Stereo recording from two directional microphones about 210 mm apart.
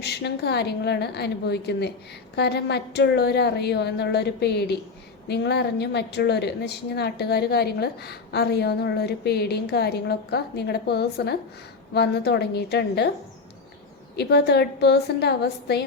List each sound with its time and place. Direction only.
0.0 s a woman's voice: 50° left (ahead or behind)
14.2 s a woman's voice: 50° left (ahead or behind)